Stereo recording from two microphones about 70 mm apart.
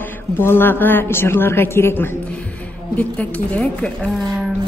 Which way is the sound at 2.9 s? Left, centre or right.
Centre.